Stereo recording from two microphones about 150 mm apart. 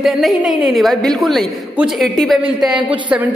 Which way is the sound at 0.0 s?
Centre (ahead or behind).